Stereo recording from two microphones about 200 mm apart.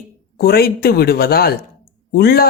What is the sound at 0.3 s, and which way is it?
Speech, 50° left (ahead or behind).